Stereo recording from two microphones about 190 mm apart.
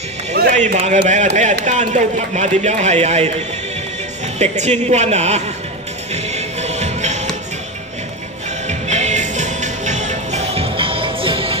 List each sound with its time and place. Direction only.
0.5 s speech: 40° right (ahead or behind)
4.4 s speech: 35° right (ahead or behind)
6.1 s music: 35° right (ahead or behind)
8.6 s music: 35° right (ahead or behind)